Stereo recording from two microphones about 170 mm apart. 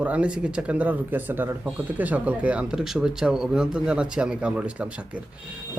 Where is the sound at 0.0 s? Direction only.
5° right (ahead or behind).